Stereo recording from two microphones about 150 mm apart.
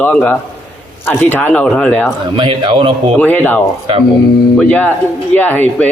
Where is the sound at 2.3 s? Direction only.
30° right (ahead or behind).